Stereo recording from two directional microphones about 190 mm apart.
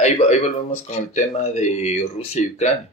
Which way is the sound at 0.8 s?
35° left (ahead or behind).